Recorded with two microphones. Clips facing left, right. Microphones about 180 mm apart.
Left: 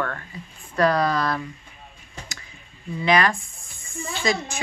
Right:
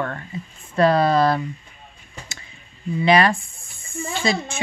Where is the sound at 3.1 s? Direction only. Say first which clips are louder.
Right 3 dB; 30° right (ahead or behind).